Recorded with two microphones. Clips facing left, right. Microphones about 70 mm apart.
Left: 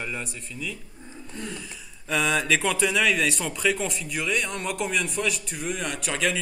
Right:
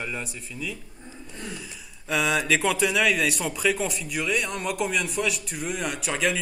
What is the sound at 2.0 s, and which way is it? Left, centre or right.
Speech, centre.